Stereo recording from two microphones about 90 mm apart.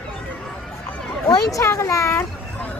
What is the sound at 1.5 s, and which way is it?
Speech, 35° left (ahead or behind).